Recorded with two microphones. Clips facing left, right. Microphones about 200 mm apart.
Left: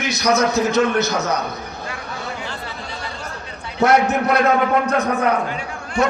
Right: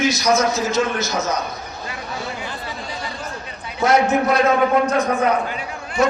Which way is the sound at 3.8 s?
60° left (ahead or behind).